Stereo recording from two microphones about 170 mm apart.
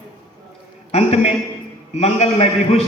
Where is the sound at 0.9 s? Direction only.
40° left (ahead or behind).